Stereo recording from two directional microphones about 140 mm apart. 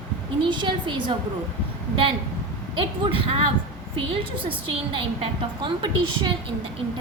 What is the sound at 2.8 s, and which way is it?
Speech, 40° right (ahead or behind).